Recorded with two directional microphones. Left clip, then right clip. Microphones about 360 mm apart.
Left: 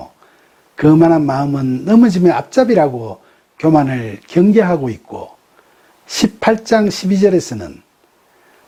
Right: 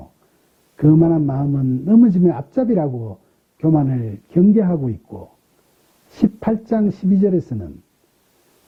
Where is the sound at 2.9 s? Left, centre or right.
Left.